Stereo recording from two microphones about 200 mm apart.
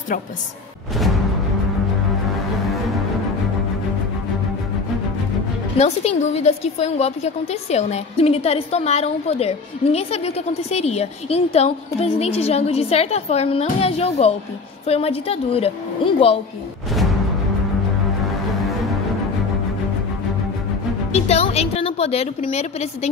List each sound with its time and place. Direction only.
0.9 s music: centre (ahead or behind)
5.8 s a woman's voice: 30° left (ahead or behind)
21.1 s music: 30° left (ahead or behind)